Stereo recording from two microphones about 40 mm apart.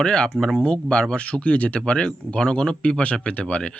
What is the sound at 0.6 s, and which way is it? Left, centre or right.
Speech, left.